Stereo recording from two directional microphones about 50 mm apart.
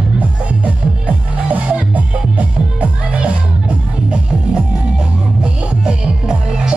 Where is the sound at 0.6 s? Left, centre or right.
Right.